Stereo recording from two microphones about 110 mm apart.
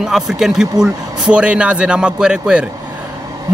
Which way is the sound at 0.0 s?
5° right (ahead or behind).